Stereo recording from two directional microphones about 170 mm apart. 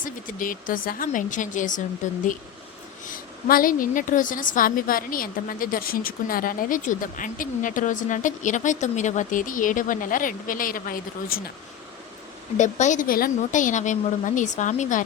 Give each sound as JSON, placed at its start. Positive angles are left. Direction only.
{"t": 0.0, "sound": "a woman's voice", "side_deg": 55}
{"t": 12.5, "sound": "a woman's voice", "side_deg": 45}